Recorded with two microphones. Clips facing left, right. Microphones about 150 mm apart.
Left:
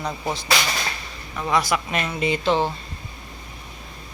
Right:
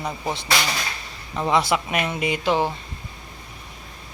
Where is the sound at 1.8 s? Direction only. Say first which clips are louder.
Even; 15° right (ahead or behind).